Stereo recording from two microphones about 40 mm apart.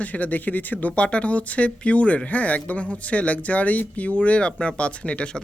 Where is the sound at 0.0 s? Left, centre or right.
Left.